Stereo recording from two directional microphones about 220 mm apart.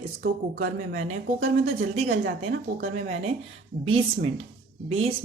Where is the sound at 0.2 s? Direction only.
40° right (ahead or behind).